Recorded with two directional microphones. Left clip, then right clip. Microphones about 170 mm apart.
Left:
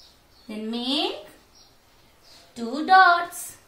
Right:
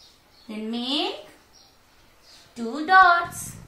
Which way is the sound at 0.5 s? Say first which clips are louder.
Even; 25° left (ahead or behind).